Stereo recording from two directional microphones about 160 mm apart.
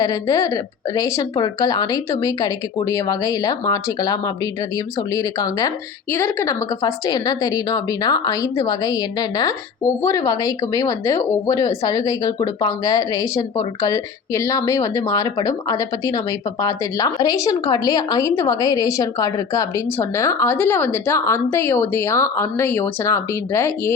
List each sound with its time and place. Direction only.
0.0 s a woman's voice: 25° left (ahead or behind)